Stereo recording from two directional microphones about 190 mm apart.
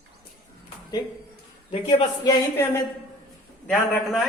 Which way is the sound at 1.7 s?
30° left (ahead or behind).